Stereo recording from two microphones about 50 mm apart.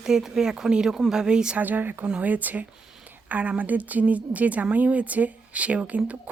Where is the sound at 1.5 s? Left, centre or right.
Right.